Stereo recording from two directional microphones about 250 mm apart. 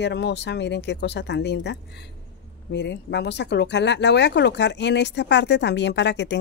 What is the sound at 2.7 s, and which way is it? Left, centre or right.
Speech, left.